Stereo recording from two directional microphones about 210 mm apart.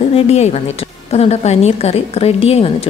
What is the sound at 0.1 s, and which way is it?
A woman's voice, 30° left (ahead or behind).